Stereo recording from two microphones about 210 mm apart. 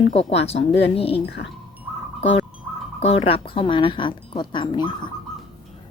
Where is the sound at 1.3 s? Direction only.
50° left (ahead or behind).